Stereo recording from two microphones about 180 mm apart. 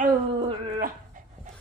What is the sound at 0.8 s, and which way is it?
Dog, 45° right (ahead or behind).